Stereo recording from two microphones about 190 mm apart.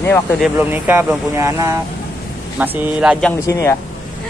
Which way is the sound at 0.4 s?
10° right (ahead or behind).